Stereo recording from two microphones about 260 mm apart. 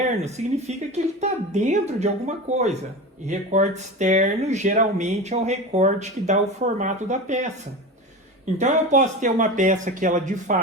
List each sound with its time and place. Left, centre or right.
0.2 s speech: right
8.5 s speech: right